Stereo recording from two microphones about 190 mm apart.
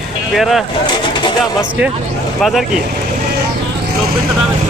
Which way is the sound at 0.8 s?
25° left (ahead or behind).